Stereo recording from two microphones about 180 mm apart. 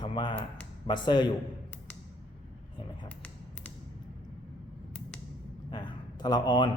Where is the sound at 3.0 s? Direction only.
5° left (ahead or behind).